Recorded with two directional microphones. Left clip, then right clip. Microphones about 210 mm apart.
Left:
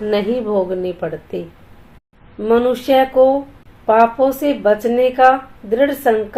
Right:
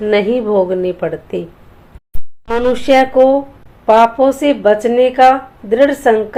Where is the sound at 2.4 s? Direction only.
20° right (ahead or behind).